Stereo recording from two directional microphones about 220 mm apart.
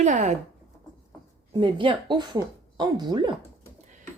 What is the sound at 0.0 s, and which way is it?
Speech, 35° right (ahead or behind).